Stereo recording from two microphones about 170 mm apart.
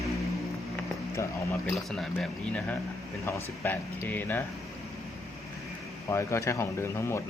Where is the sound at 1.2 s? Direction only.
15° left (ahead or behind).